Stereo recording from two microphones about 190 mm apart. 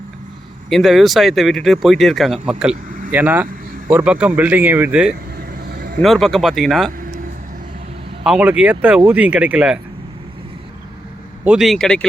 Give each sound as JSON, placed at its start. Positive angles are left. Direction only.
{"t": 0.7, "sound": "speech", "side_deg": 0}
{"t": 5.7, "sound": "a sound", "side_deg": -50}
{"t": 6.0, "sound": "speech", "side_deg": 0}
{"t": 8.2, "sound": "speech", "side_deg": -5}
{"t": 11.4, "sound": "speech", "side_deg": 0}